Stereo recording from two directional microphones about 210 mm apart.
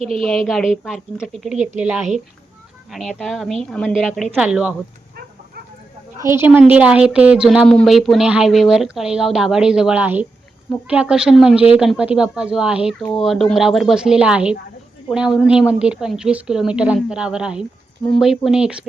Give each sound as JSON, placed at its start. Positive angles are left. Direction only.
{"t": 0.0, "sound": "speech", "side_deg": -30}
{"t": 0.3, "sound": "a woman's voice", "side_deg": 0}
{"t": 2.9, "sound": "a woman's voice", "side_deg": 0}
{"t": 6.1, "sound": "a woman's voice", "side_deg": -15}